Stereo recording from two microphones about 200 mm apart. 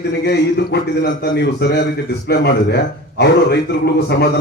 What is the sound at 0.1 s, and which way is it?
A man's voice, 55° left (ahead or behind).